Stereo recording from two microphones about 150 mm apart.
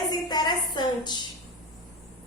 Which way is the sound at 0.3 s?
30° left (ahead or behind).